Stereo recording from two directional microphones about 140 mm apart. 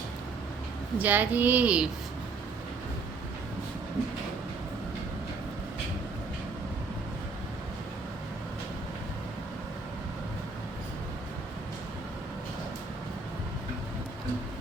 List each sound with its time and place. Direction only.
0.9 s speech: 10° right (ahead or behind)